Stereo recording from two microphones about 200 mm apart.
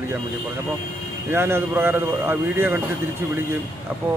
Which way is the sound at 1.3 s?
10° right (ahead or behind).